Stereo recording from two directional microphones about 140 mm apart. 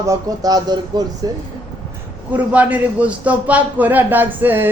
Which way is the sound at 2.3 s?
10° right (ahead or behind).